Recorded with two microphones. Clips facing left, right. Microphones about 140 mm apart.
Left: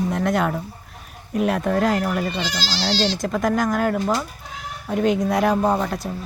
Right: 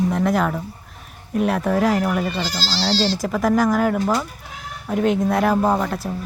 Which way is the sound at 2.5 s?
30° right (ahead or behind).